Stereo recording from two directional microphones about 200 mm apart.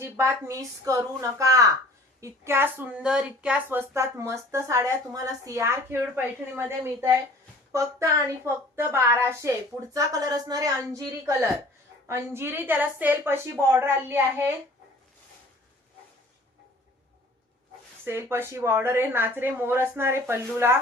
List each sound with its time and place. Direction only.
0.0 s speech: 10° right (ahead or behind)
18.0 s speech: 10° right (ahead or behind)